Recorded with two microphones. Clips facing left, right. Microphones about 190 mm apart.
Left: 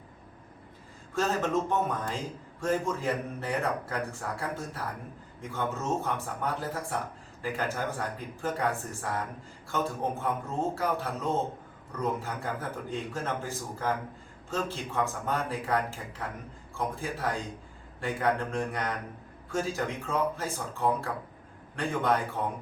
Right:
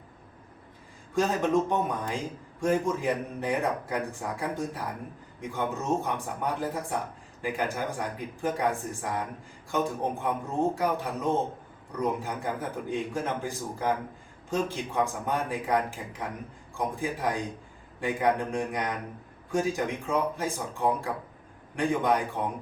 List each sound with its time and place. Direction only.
1.1 s a man's voice: 15° right (ahead or behind)